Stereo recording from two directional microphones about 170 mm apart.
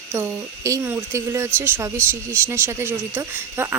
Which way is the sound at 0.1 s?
15° right (ahead or behind).